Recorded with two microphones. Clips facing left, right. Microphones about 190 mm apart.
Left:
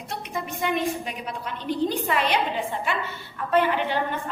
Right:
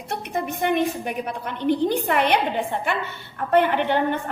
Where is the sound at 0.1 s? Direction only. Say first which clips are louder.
Right 5 dB; 60° right (ahead or behind).